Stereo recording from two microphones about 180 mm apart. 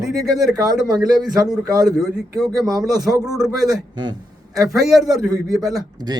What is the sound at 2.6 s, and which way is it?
Speech, 20° right (ahead or behind).